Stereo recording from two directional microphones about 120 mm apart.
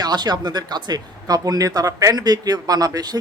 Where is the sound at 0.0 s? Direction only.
35° right (ahead or behind).